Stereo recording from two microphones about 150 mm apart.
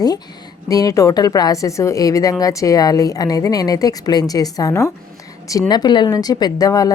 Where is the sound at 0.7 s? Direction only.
25° left (ahead or behind).